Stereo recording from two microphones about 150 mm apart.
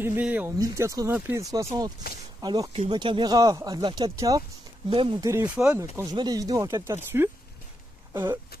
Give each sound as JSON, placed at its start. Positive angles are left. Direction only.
{"t": 0.0, "sound": "speech", "side_deg": -10}
{"t": 0.6, "sound": "speech", "side_deg": -20}
{"t": 5.2, "sound": "speech", "side_deg": -20}
{"t": 8.1, "sound": "a sound", "side_deg": -15}